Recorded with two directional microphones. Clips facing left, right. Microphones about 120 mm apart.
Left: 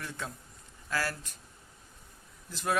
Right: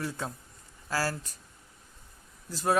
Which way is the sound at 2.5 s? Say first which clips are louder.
Right 4 dB; 35° right (ahead or behind).